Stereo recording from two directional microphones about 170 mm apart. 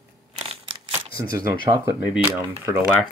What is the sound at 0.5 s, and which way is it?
Camera, 30° right (ahead or behind).